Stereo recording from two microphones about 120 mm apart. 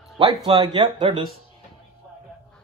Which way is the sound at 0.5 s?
35° right (ahead or behind).